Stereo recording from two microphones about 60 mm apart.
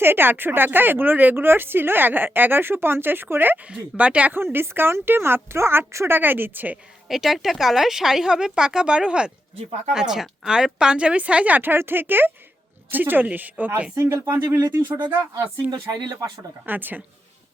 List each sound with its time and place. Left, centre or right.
0.0 s speech: right
3.7 s speech: right
4.5 s speech: right
6.1 s speech: right
7.1 s speech: centre; by 13.8 s right
14.0 s speech: right
14.8 s speech: right
15.9 s speech: right
16.6 s speech: right